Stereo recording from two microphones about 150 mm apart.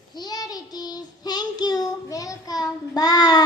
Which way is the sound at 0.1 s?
25° left (ahead or behind).